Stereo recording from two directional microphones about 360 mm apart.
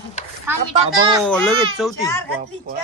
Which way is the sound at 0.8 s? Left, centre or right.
Centre.